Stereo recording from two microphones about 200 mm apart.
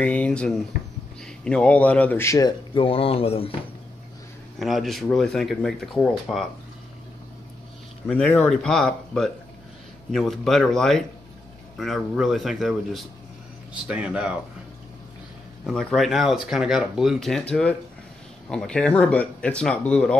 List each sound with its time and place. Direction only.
0.0 s speech: 5° left (ahead or behind); by 3.5 s 30° left (ahead or behind)
4.6 s speech: centre (ahead or behind)
8.1 s speech: 5° left (ahead or behind)
15.6 s speech: 5° left (ahead or behind)